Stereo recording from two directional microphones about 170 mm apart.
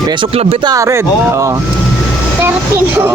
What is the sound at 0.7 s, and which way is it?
Speech, 15° right (ahead or behind).